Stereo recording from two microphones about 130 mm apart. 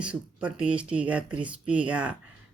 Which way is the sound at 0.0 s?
10° right (ahead or behind).